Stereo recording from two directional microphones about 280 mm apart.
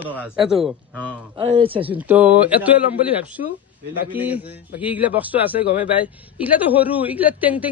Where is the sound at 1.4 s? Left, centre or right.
Centre.